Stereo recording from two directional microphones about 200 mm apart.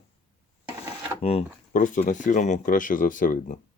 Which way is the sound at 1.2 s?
35° left (ahead or behind).